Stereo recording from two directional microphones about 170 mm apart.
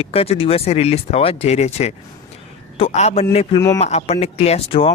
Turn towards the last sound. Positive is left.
turn(degrees=35)  # may be behind; listen again after turning